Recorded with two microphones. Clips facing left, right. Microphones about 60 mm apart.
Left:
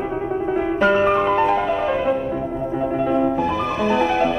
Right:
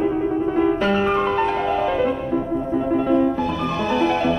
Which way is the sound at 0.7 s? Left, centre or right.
Centre.